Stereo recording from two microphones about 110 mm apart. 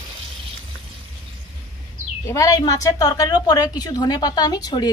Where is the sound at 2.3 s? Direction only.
30° left (ahead or behind).